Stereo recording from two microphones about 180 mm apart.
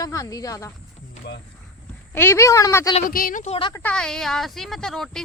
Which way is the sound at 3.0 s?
50° left (ahead or behind).